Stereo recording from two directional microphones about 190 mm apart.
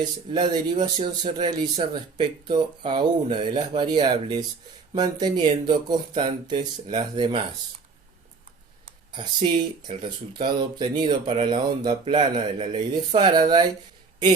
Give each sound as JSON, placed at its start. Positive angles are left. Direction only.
{"t": 0.3, "sound": "speech", "side_deg": -25}
{"t": 9.1, "sound": "speech", "side_deg": -25}